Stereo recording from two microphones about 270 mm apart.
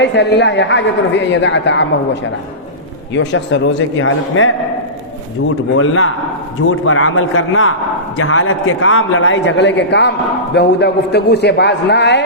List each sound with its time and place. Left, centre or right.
0.0 s a woman's voice: left
3.1 s a man's voice: left
5.7 s a man's voice: left